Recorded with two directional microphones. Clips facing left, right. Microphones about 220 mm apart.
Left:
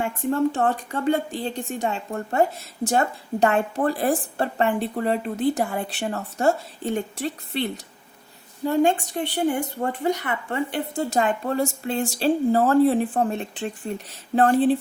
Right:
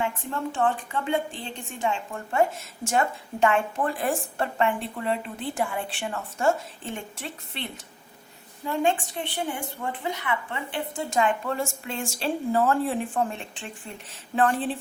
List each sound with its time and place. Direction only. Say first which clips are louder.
0.0 s a woman's voice: left 7 dB; 40° left (ahead or behind)